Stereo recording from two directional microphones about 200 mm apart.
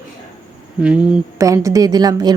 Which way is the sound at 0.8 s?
5° right (ahead or behind).